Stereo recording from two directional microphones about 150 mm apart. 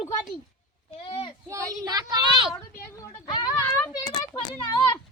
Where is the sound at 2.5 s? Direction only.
15° left (ahead or behind).